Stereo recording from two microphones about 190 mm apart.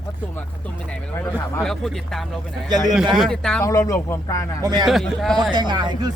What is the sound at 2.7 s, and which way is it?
Speech, 20° right (ahead or behind).